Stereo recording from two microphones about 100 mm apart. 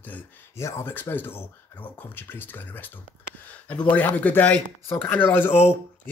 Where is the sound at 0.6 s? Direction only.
30° left (ahead or behind).